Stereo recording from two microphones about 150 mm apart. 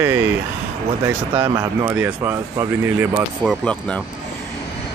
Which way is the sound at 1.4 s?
15° right (ahead or behind).